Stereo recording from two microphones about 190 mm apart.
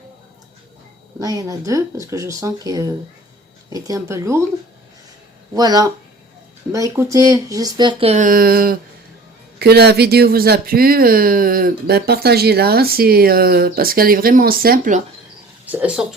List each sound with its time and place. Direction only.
1.2 s speech: 20° right (ahead or behind)
5.5 s speech: 20° right (ahead or behind); by 15.0 s 45° right (ahead or behind)
15.6 s speech: 10° right (ahead or behind)